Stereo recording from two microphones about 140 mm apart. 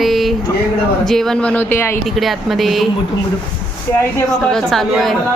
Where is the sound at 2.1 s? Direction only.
Centre (ahead or behind).